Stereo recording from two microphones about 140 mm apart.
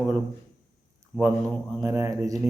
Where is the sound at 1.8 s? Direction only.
20° right (ahead or behind).